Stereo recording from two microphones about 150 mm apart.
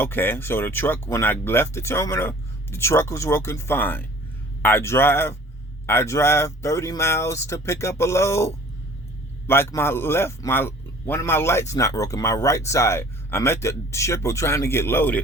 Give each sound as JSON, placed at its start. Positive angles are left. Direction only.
{"t": 0.0, "sound": "speech", "side_deg": 15}